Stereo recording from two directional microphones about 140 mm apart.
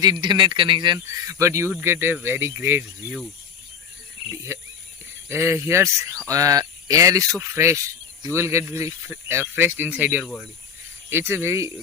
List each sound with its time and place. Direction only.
0.0 s speech: 30° right (ahead or behind)
0.9 s speech: 20° right (ahead or behind)
4.5 s speech: 20° right (ahead or behind)